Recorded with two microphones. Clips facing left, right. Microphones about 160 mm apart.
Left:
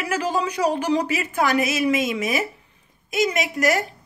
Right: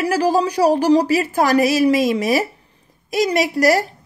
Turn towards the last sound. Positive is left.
turn(degrees=-35)  # may be behind; listen again after turning